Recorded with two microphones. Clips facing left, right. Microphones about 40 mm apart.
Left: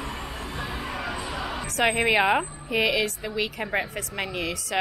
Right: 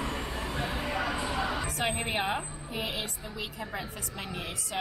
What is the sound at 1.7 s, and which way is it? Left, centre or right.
A woman's voice, left.